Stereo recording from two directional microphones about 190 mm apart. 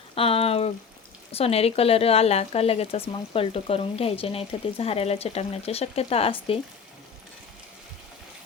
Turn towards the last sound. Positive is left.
turn(degrees=30)  # may be behind; listen again after turning